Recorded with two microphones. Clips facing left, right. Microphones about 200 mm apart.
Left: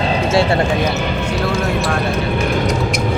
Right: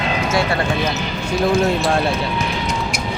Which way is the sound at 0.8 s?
55° left (ahead or behind).